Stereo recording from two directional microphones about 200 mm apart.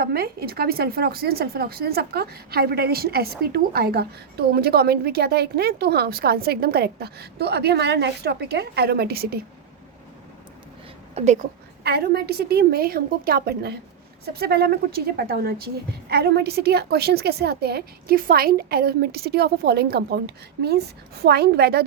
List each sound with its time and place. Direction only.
0.0 s speech: 50° right (ahead or behind)
11.1 s speech: 35° right (ahead or behind)
11.8 s speech: 55° right (ahead or behind)